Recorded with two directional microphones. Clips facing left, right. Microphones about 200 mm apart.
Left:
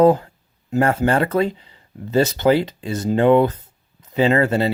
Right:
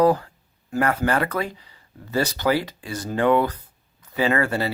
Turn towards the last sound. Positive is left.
turn(degrees=25)  # may be behind; listen again after turning